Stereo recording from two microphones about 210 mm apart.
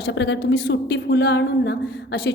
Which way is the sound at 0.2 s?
55° left (ahead or behind).